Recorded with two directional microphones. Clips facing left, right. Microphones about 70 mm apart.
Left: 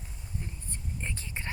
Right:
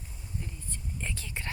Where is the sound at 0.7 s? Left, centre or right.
Left.